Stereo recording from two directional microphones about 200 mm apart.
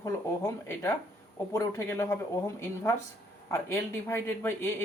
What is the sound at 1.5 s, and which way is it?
Speech, 15° left (ahead or behind).